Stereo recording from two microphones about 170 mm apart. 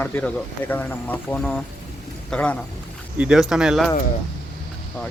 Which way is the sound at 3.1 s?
5° right (ahead or behind).